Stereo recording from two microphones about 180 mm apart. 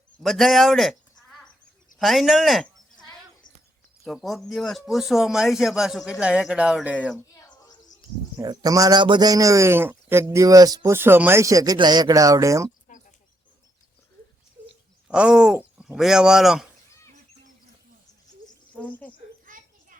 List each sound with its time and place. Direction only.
0.2 s a man's voice: centre (ahead or behind)
8.4 s a man's voice: 20° right (ahead or behind)
15.0 s speech: 5° right (ahead or behind)
18.8 s a woman's voice: 10° left (ahead or behind)
19.5 s a sound: 50° right (ahead or behind)